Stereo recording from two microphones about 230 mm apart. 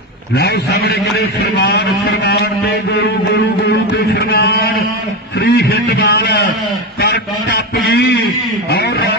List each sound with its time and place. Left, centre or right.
0.4 s a man's voice: left
3.6 s a sound: left
5.4 s a man's voice: left